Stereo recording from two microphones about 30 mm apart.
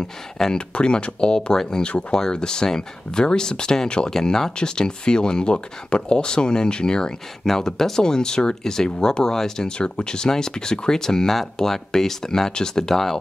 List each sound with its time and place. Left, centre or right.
0.0 s speech: left
0.7 s speech: left
7.4 s speech: centre
9.7 s speech: left
11.9 s speech: centre